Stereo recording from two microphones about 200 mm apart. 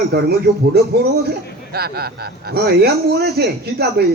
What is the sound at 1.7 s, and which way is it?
A man's voice, 50° right (ahead or behind).